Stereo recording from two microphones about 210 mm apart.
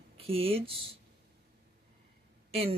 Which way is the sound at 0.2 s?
25° right (ahead or behind).